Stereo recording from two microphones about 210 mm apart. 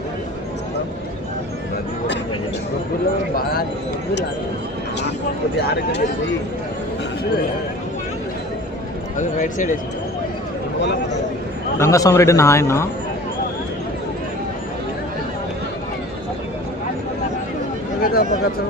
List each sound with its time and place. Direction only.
5.6 s speech: 50° left (ahead or behind)
9.1 s speech: 40° left (ahead or behind)
11.8 s speech: 15° left (ahead or behind)
18.0 s a sound: 45° left (ahead or behind)